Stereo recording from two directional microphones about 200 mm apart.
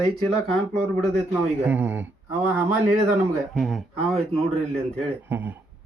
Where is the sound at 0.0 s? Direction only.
Centre (ahead or behind).